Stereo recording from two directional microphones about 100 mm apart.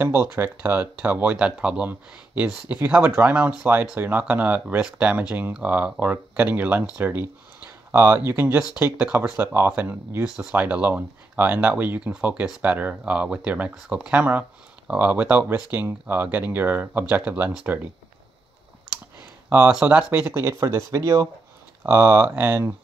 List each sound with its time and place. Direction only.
0.0 s speech: 25° right (ahead or behind)
8.9 s speech: 10° right (ahead or behind)
10.2 s speech: 5° right (ahead or behind)
19.7 s speech: 10° right (ahead or behind); by 21.3 s 35° right (ahead or behind)
21.8 s speech: 25° right (ahead or behind)